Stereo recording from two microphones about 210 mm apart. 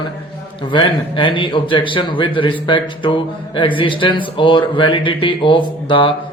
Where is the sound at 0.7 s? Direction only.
25° left (ahead or behind).